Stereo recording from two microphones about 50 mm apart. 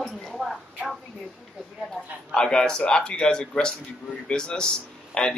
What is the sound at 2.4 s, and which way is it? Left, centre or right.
Speech, centre.